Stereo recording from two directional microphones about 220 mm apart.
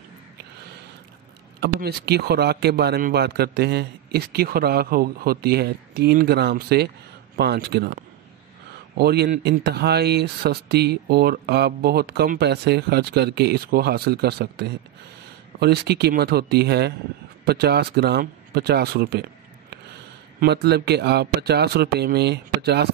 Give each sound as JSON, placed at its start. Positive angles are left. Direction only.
{"t": 1.6, "sound": "speech", "side_deg": -45}
{"t": 20.3, "sound": "speech", "side_deg": -45}